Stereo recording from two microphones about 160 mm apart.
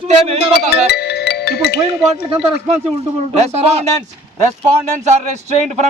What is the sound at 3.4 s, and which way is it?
Speech, 40° right (ahead or behind).